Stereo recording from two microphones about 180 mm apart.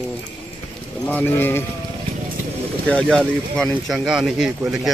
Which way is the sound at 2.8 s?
5° left (ahead or behind).